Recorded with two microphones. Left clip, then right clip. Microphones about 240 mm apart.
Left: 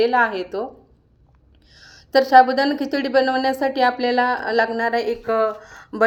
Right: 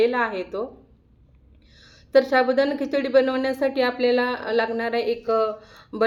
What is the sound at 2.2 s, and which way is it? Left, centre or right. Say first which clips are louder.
A woman's voice: left 5 dB; centre.